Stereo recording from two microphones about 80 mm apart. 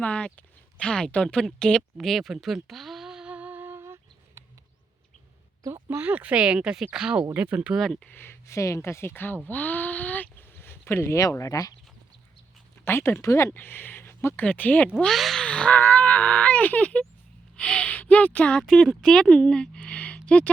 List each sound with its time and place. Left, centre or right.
0.0 s speech: centre; by 3.8 s right
3.8 s a sound: right
5.9 s speech: right
7.8 s speech: centre
8.1 s speech: left
9.5 s a sound: left
11.2 s speech: left
12.8 s speech: left
13.5 s speech: left
14.9 s speech: centre
15.4 s livestock: centre
17.6 s speech: centre